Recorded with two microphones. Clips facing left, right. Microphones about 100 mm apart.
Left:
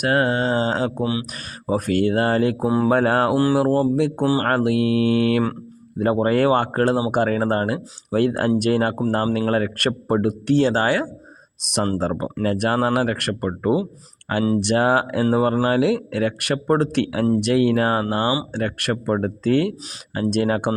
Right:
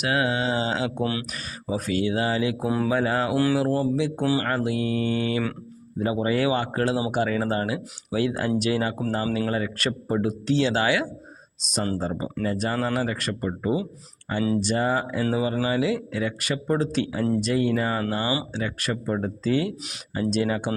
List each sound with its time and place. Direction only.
0.0 s speech: 45° left (ahead or behind)
1.0 s speech: 20° left (ahead or behind)
1.3 s speech: 50° left (ahead or behind)
2.6 s speech: 30° left (ahead or behind)
2.9 s speech: 60° left (ahead or behind)
3.3 s speech: 35° left (ahead or behind)
4.2 s speech: 35° left (ahead or behind)
4.4 s speech: 60° left (ahead or behind)
6.0 s speech: 55° left (ahead or behind)
11.6 s speech: 60° left (ahead or behind)
11.9 s speech: 70° left (ahead or behind)
15.2 s speech: 50° left (ahead or behind); by 18.0 s 75° left (ahead or behind)
18.5 s speech: 60° left (ahead or behind)